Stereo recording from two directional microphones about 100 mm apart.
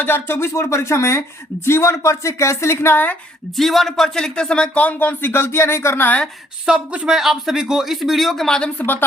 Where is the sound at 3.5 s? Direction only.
Centre (ahead or behind); by 6.2 s 20° left (ahead or behind).